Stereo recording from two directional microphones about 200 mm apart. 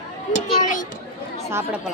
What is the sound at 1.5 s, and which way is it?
Speech, 10° right (ahead or behind).